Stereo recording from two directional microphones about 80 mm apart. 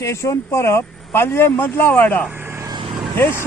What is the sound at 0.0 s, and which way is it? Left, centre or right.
Speech, left.